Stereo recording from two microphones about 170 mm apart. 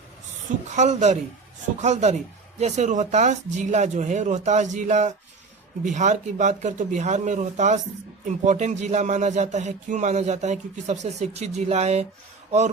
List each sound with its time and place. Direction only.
0.4 s speech: 45° right (ahead or behind)